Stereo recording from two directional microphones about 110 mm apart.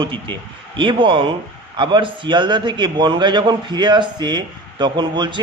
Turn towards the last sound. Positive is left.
turn(degrees=-45)  # may be behind; listen again after turning